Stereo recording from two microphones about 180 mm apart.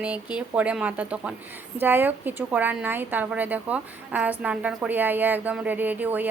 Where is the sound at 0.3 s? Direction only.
5° right (ahead or behind).